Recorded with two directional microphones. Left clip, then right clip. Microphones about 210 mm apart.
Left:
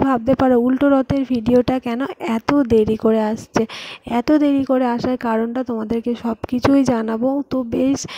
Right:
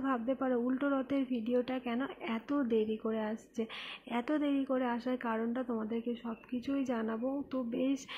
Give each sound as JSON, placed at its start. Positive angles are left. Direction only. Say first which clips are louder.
{"t": 0.1, "sound": "a woman's voice", "louder": "left 15 dB", "side_deg": 50}